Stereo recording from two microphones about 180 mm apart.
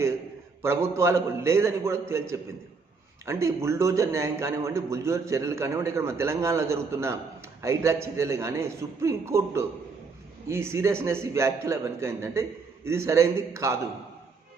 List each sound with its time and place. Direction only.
0.6 s a man's voice: 15° right (ahead or behind)